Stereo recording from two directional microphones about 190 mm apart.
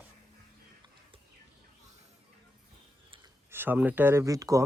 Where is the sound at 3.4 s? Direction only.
10° right (ahead or behind).